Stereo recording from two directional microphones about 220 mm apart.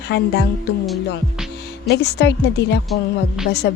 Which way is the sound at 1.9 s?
50° left (ahead or behind).